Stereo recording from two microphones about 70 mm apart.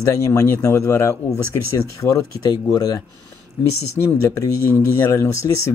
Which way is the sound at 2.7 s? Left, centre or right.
Left.